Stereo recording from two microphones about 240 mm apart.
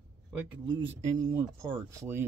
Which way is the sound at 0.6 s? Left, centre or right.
Right.